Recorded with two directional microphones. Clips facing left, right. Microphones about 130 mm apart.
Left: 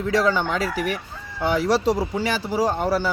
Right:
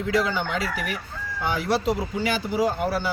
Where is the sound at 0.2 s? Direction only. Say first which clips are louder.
Left 6 dB; 40° left (ahead or behind).